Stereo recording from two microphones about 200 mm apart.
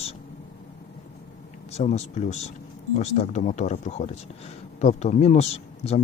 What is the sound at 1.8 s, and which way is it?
A man's voice, 35° left (ahead or behind).